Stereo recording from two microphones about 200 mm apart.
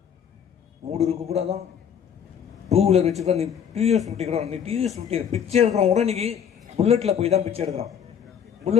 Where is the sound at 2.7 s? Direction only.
30° right (ahead or behind).